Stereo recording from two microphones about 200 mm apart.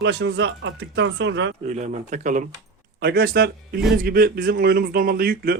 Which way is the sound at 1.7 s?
35° right (ahead or behind).